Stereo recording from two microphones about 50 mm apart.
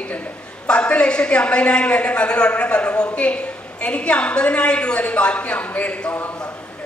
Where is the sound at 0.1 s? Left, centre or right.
Left.